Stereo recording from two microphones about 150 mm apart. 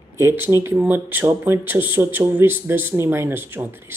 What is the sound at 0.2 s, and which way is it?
Speech, 15° right (ahead or behind).